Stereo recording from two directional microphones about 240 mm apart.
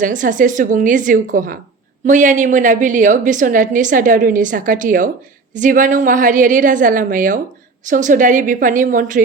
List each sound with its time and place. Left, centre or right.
0.0 s a woman's voice: right